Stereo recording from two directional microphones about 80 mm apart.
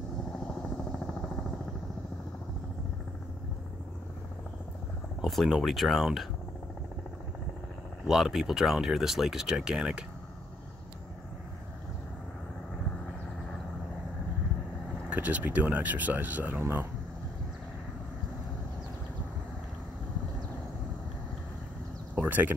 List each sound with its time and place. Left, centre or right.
0.5 s vehicle: centre
5.2 s speech: centre
8.1 s speech: centre
15.0 s speech: centre
22.1 s a sound: right